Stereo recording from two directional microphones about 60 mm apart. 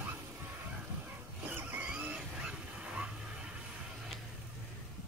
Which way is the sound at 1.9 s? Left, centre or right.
Centre.